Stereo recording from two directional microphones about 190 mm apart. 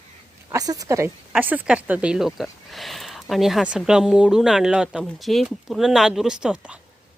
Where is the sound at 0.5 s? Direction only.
20° right (ahead or behind).